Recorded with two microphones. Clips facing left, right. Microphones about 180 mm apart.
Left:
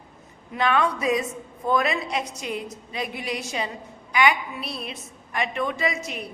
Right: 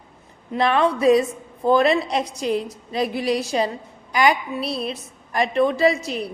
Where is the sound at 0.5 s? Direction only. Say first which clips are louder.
Right 4 dB; 35° right (ahead or behind).